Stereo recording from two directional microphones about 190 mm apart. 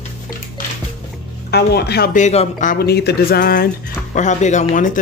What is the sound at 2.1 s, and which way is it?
Speech, 40° left (ahead or behind).